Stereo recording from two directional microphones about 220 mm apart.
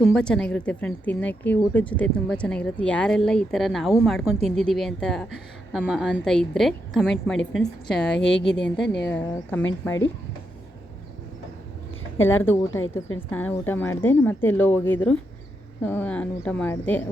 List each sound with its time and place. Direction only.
0.0 s a woman's voice: 5° left (ahead or behind)
8.1 s a woman's voice: 55° left (ahead or behind)
9.0 s a woman's voice: 10° left (ahead or behind)
12.4 s a woman's voice: 10° left (ahead or behind)